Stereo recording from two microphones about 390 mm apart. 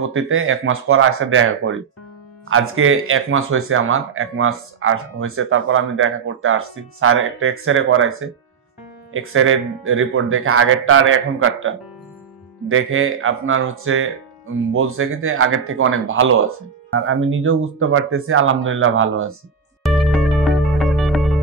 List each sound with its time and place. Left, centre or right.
0.0 s speech: right
19.8 s music: centre